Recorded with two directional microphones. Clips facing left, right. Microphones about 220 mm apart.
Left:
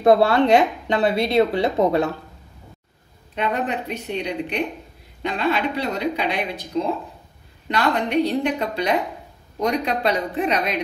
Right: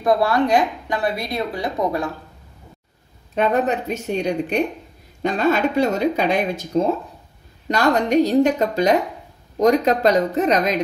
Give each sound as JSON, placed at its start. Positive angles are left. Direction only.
{"t": 0.0, "sound": "a woman's voice", "side_deg": 25}
{"t": 3.3, "sound": "speech", "side_deg": -45}